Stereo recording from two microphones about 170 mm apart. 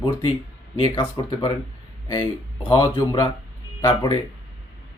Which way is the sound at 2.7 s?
25° left (ahead or behind).